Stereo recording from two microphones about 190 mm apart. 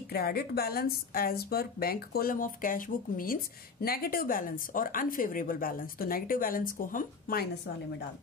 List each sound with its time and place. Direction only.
0.1 s a woman's voice: 55° left (ahead or behind)